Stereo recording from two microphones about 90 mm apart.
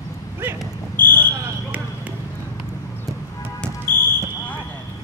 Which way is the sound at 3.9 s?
25° left (ahead or behind).